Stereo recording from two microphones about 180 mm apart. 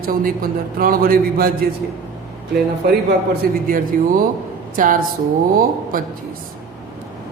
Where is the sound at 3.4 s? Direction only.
55° right (ahead or behind).